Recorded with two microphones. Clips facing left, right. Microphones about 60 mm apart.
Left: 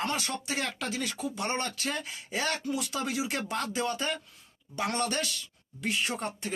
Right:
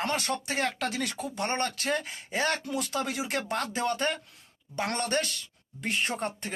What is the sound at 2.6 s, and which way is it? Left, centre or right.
Speech, right.